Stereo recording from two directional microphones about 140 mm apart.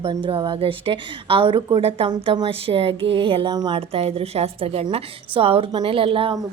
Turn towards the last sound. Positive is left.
turn(degrees=-40)  # may be behind; listen again after turning